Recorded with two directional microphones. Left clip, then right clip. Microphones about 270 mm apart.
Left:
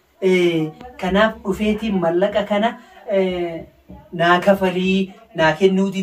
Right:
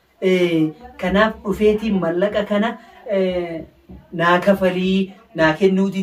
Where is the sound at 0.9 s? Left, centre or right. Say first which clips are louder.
Left 1 dB; centre.